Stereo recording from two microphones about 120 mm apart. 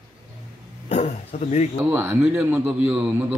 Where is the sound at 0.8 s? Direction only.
65° left (ahead or behind).